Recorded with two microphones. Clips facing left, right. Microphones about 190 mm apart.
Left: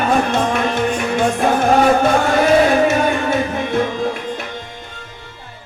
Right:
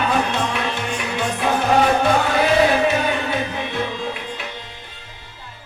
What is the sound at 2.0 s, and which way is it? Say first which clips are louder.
Music: left 3 dB; 45° left (ahead or behind).